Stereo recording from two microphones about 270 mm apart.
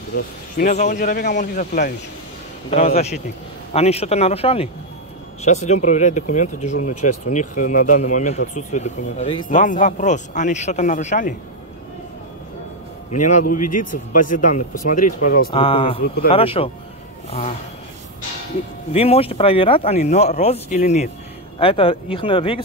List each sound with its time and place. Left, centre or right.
0.1 s speech: left
13.1 s speech: left
15.5 s speech: centre
17.3 s a sound: left
18.9 s speech: left